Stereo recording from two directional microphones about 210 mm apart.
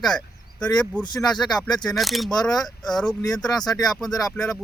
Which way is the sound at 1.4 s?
5° left (ahead or behind).